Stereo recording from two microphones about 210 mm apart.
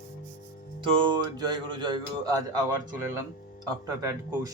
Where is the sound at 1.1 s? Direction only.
20° right (ahead or behind).